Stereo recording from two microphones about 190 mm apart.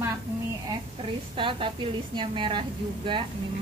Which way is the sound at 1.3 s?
25° right (ahead or behind).